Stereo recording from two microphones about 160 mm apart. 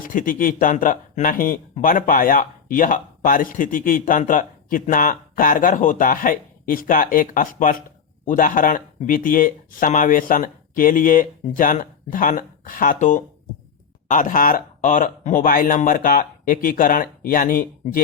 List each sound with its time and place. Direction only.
0.0 s speech: 60° left (ahead or behind)